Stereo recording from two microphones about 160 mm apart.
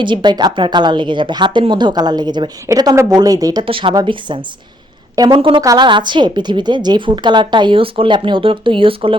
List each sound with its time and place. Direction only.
0.0 s a woman's voice: 30° right (ahead or behind)